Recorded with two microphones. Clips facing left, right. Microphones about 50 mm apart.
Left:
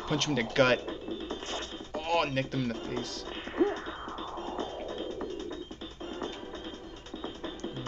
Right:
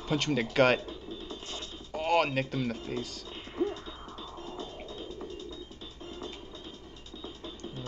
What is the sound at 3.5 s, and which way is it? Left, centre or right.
Music, left.